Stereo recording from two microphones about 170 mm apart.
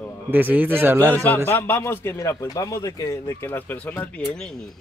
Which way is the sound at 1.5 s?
15° left (ahead or behind).